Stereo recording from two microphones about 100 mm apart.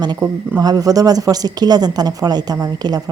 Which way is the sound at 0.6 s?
40° right (ahead or behind).